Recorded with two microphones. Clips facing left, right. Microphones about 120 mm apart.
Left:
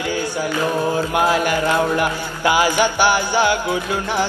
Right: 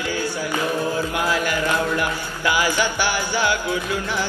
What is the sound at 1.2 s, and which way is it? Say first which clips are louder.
Music: left 6 dB; 25° left (ahead or behind).